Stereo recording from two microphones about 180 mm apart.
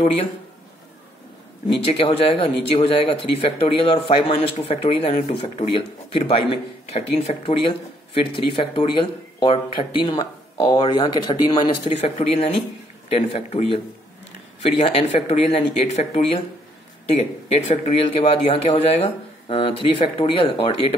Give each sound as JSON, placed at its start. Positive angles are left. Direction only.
{"t": 1.9, "sound": "speech", "side_deg": 30}